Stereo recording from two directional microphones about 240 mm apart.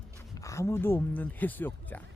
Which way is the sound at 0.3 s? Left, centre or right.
Centre.